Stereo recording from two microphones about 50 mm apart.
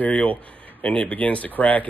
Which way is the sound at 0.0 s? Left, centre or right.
Left.